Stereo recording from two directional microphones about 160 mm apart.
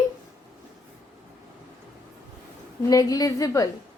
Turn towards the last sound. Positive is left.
turn(degrees=20)  # may be behind; listen again after turning